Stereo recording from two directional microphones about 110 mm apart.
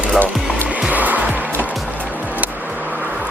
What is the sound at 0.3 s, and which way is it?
Music, 5° right (ahead or behind).